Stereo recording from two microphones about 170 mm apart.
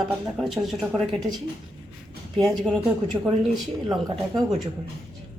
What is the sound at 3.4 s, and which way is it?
Speech, centre (ahead or behind).